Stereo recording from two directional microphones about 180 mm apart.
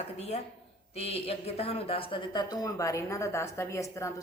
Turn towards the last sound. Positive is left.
turn(degrees=15)  # may be behind; listen again after turning